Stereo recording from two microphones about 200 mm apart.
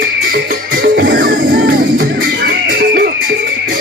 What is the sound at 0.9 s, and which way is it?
Music, 45° right (ahead or behind).